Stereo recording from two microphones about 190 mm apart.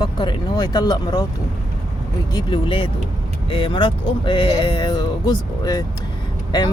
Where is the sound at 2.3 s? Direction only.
25° left (ahead or behind).